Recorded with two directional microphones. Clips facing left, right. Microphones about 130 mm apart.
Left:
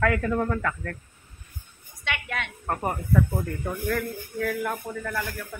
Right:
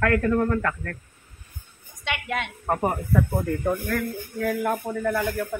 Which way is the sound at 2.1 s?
15° right (ahead or behind).